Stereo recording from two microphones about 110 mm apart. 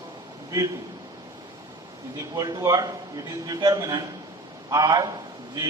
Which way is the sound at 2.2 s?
35° right (ahead or behind).